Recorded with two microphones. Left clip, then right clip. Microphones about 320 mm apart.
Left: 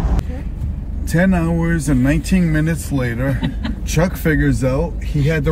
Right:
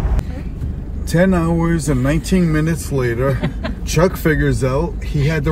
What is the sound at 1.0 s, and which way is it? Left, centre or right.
Speech, centre.